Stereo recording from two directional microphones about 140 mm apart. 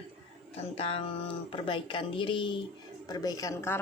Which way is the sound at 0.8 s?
40° left (ahead or behind).